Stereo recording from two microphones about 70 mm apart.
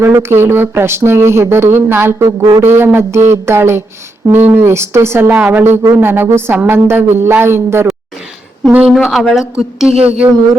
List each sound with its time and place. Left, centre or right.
0.0 s speech: right
8.9 s speech: centre